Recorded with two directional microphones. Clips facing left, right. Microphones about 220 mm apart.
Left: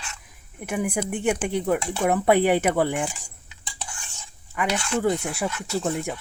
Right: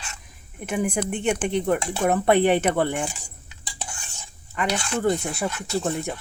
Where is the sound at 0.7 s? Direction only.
10° left (ahead or behind).